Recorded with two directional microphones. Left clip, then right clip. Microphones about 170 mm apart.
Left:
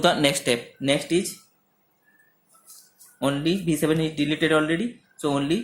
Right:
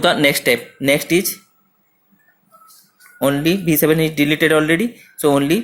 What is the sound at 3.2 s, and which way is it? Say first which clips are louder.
Speech: right 8 dB; 40° right (ahead or behind).